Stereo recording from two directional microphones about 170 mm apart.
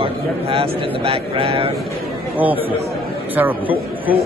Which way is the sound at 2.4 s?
10° right (ahead or behind).